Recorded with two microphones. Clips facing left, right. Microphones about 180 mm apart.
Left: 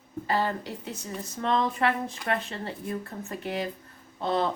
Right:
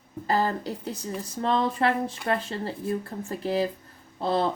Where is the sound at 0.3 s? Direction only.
40° right (ahead or behind).